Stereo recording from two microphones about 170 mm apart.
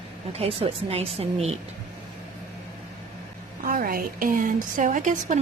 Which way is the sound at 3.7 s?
60° right (ahead or behind).